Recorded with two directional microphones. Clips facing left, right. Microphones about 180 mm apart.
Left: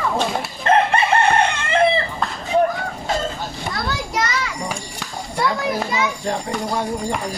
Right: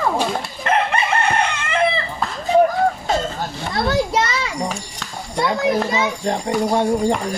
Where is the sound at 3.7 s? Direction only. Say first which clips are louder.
Right 8 dB; 25° right (ahead or behind).